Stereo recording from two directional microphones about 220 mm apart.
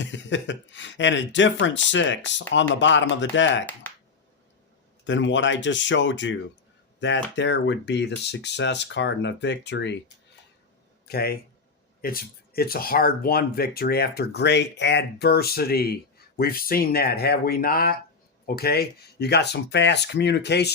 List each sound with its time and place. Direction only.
0.0 s speech: 55° left (ahead or behind)
5.0 s speech: 55° left (ahead or behind)
11.1 s speech: 45° left (ahead or behind)